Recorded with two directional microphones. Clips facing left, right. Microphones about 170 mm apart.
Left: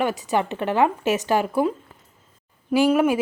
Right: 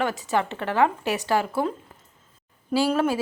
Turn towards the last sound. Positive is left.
turn(degrees=15)  # may be behind; listen again after turning